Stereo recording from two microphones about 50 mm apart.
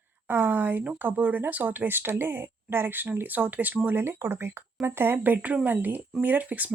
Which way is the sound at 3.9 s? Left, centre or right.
Right.